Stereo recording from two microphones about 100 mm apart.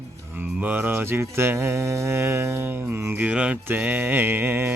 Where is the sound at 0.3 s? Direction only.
15° right (ahead or behind).